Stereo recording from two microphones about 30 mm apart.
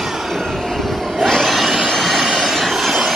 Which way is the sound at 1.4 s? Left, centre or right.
Centre.